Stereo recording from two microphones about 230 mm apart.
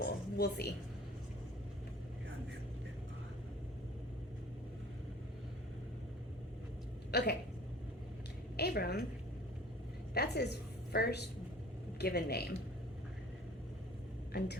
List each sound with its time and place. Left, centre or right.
0.0 s a sound: left
7.1 s speech: left
8.5 s a woman's voice: left
10.2 s a woman's voice: left